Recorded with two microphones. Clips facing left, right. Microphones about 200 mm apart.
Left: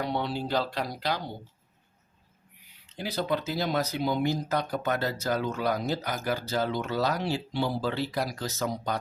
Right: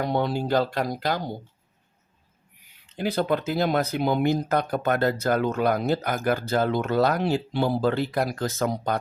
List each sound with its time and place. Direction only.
0.0 s speech: 45° right (ahead or behind)
2.9 s speech: 55° right (ahead or behind)